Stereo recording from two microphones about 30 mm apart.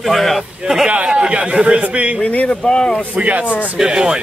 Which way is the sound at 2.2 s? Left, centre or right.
Left.